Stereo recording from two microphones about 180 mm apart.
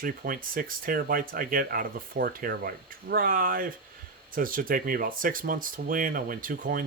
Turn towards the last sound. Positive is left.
turn(degrees=-50)  # may be behind; listen again after turning